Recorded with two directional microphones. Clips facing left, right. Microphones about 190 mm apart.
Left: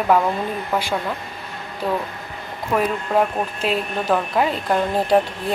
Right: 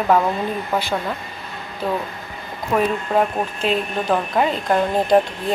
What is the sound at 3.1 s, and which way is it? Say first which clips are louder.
Speech: even; 5° left (ahead or behind).